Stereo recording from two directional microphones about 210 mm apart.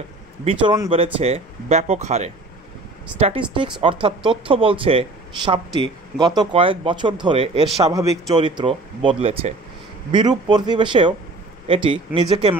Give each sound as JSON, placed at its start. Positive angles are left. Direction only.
{"t": 0.5, "sound": "speech", "side_deg": -25}